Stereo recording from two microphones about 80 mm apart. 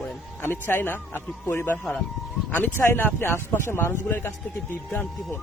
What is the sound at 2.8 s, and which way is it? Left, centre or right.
Speech, left.